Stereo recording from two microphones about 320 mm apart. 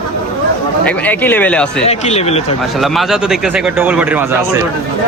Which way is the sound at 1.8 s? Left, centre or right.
Centre.